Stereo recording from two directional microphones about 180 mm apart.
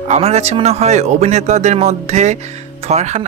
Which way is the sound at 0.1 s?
35° right (ahead or behind).